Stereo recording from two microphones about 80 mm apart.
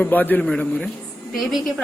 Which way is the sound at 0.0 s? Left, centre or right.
Left.